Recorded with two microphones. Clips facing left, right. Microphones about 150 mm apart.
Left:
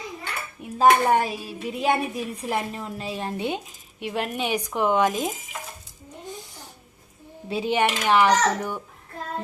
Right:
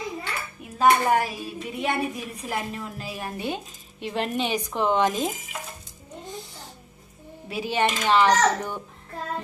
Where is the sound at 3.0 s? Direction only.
25° left (ahead or behind).